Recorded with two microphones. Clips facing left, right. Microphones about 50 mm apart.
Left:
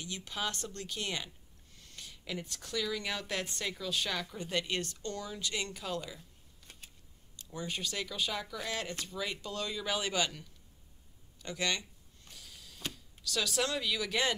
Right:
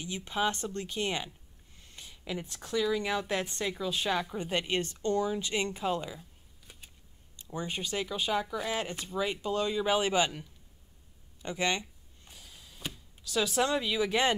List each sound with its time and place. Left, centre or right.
0.0 s speech: right
7.3 s speech: right
12.3 s a sound: centre